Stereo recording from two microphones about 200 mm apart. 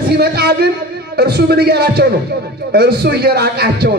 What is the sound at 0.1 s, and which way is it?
Speech, 55° right (ahead or behind).